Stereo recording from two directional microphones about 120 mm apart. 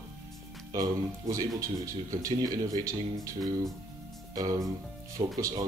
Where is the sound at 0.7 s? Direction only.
30° right (ahead or behind).